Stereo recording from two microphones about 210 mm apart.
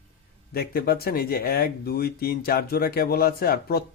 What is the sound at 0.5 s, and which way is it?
Speech, 45° left (ahead or behind).